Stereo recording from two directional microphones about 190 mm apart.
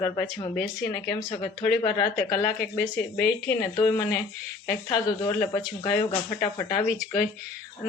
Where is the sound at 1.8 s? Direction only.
20° left (ahead or behind).